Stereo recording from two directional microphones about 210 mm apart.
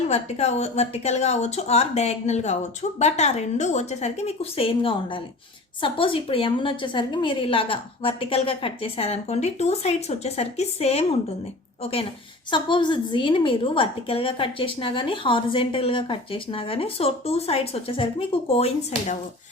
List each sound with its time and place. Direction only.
0.1 s a woman's voice: 30° left (ahead or behind)